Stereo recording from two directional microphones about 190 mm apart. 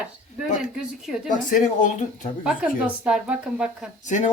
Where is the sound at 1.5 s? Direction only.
40° left (ahead or behind).